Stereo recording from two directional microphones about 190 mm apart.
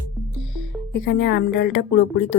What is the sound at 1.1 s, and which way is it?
Speech, 65° left (ahead or behind).